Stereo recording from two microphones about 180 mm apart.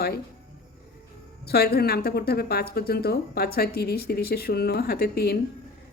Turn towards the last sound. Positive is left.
turn(degrees=60)  # may be behind; listen again after turning